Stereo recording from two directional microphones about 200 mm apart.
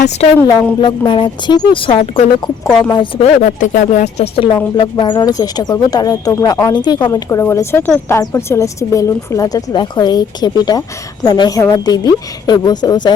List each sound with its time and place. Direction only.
0.3 s a woman's voice: 15° left (ahead or behind)
2.6 s a woman's voice: centre (ahead or behind)
2.9 s speech: 25° left (ahead or behind)
4.8 s a woman's voice: 20° left (ahead or behind)